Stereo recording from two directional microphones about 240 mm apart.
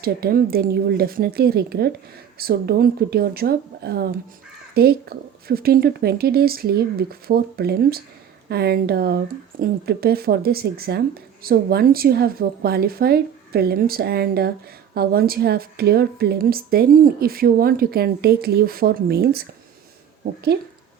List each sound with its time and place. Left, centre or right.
0.0 s speech: right
20.5 s speech: right